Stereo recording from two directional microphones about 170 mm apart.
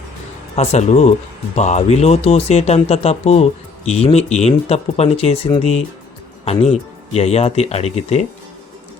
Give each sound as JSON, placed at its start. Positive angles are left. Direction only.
{"t": 0.5, "sound": "speech", "side_deg": 40}